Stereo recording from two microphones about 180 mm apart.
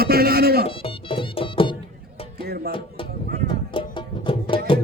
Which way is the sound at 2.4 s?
60° right (ahead or behind).